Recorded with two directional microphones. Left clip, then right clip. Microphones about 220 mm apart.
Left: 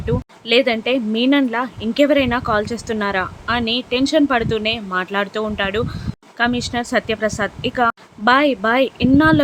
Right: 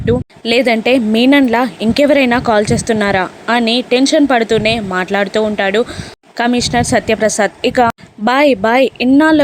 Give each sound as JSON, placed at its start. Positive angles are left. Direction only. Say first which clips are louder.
{"t": 0.0, "sound": "speech", "louder": "right 8 dB", "side_deg": -20}